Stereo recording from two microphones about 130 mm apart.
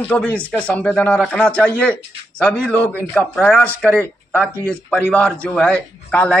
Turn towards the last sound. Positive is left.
turn(degrees=10)  # may be behind; listen again after turning